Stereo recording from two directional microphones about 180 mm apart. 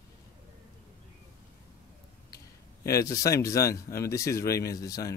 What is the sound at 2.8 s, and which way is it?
Speech, 20° left (ahead or behind).